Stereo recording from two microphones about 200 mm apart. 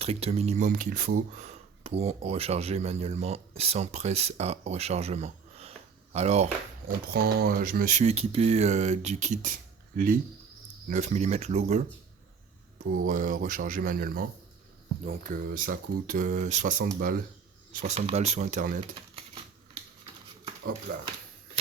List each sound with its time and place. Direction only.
0.0 s speech: 30° right (ahead or behind)
7.1 s speech: 50° right (ahead or behind)
17.7 s speech: 35° right (ahead or behind)